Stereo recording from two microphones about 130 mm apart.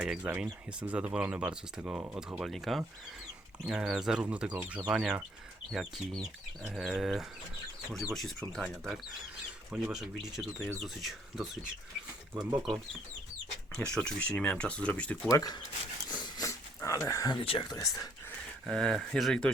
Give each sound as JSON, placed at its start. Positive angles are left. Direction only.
{"t": 0.0, "sound": "speech", "side_deg": -10}
{"t": 2.4, "sound": "speech", "side_deg": 0}
{"t": 13.7, "sound": "speech", "side_deg": 5}
{"t": 15.3, "sound": "speech", "side_deg": 30}
{"t": 16.2, "sound": "a sound", "side_deg": 25}
{"t": 17.3, "sound": "speech", "side_deg": 40}
{"t": 17.7, "sound": "speech", "side_deg": 30}
{"t": 18.6, "sound": "speech", "side_deg": 5}